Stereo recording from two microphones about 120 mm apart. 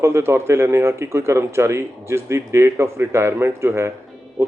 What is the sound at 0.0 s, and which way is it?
Speech, 20° right (ahead or behind).